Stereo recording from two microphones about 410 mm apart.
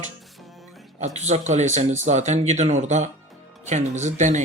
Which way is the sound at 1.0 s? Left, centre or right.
Centre.